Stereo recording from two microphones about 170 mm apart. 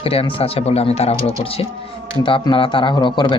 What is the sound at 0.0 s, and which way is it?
A man's voice, 35° left (ahead or behind).